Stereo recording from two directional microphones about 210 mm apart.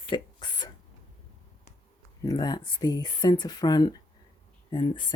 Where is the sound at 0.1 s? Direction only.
20° left (ahead or behind).